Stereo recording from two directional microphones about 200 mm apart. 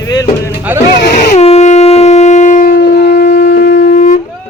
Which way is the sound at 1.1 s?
35° left (ahead or behind).